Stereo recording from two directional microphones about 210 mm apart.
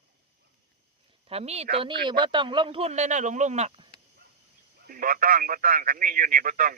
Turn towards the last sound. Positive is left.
turn(degrees=-40)  # may be behind; listen again after turning